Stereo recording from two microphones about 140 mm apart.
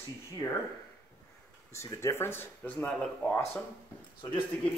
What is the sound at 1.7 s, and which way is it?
Speech, 20° left (ahead or behind).